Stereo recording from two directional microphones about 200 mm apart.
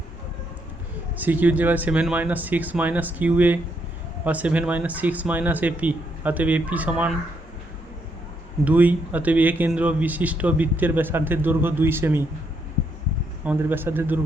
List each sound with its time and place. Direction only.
1.2 s speech: 10° right (ahead or behind)
8.6 s speech: 10° right (ahead or behind)
13.4 s speech: 10° right (ahead or behind)